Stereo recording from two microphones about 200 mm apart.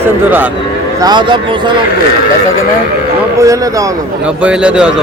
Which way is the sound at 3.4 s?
15° right (ahead or behind).